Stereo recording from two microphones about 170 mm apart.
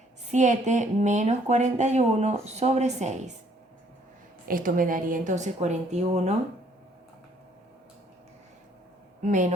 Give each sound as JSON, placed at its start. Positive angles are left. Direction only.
{"t": 0.3, "sound": "a woman's voice", "side_deg": -45}
{"t": 4.4, "sound": "a woman's voice", "side_deg": -55}
{"t": 9.2, "sound": "a woman's voice", "side_deg": -45}